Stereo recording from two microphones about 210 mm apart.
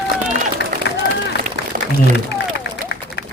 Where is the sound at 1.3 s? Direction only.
55° left (ahead or behind).